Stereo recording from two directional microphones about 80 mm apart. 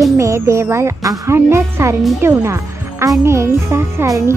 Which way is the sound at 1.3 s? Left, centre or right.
Right.